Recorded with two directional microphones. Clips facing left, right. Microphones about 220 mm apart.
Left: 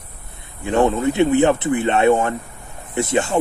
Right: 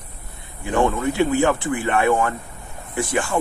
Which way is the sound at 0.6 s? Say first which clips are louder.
Left 3 dB; 20° left (ahead or behind).